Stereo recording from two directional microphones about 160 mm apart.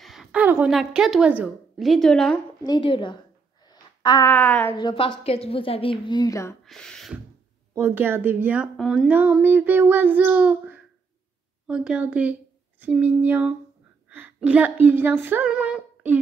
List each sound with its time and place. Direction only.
0.0 s a woman's voice: centre (ahead or behind)
2.6 s a woman's voice: 30° left (ahead or behind)
3.6 s a sound: 25° left (ahead or behind)
4.3 s a woman's voice: 10° left (ahead or behind)
4.7 s a woman's voice: 30° left (ahead or behind)
6.6 s speech: 5° left (ahead or behind)
7.7 s child singing: 15° right (ahead or behind)
11.6 s a woman's voice: 5° right (ahead or behind)
13.0 s child singing: 10° right (ahead or behind)
14.0 s speech: 10° right (ahead or behind)